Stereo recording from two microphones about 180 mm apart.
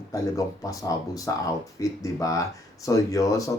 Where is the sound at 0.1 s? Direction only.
20° left (ahead or behind).